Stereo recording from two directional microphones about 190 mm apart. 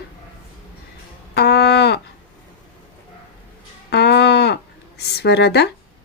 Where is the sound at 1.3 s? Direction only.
60° left (ahead or behind).